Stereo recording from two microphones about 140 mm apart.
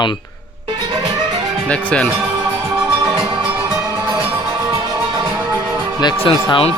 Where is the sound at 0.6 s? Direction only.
30° right (ahead or behind).